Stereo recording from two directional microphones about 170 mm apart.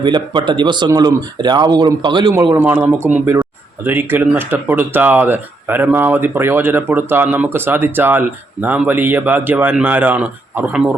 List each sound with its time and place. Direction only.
0.0 s speech: 25° right (ahead or behind); by 10.9 s 5° right (ahead or behind)